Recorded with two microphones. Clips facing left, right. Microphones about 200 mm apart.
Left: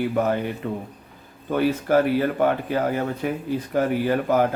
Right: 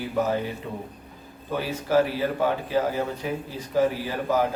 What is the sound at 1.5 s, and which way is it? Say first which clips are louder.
Speech: left 3 dB; 55° left (ahead or behind).